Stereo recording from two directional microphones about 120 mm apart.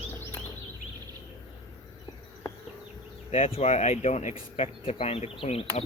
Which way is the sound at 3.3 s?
60° left (ahead or behind).